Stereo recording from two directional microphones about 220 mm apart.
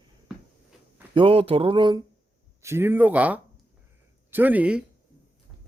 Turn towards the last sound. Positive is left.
turn(degrees=-5)  # may be behind; listen again after turning